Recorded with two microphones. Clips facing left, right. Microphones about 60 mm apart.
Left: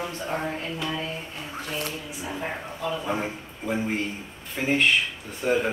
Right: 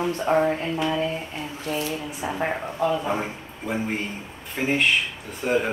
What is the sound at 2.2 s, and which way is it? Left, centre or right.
Speech, right.